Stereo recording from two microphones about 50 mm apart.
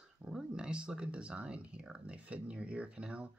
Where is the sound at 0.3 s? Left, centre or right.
Centre.